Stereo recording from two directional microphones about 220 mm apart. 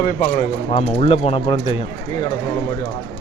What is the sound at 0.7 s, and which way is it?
Speech, 25° left (ahead or behind).